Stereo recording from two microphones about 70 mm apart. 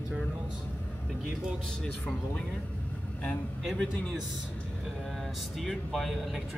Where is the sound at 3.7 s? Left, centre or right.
Centre.